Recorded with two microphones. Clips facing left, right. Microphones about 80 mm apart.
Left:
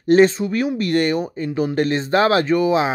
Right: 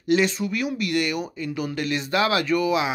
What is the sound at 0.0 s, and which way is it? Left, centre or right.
Speech, left.